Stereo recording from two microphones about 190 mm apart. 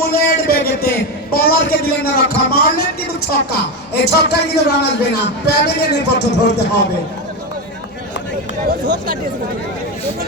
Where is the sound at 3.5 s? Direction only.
60° left (ahead or behind).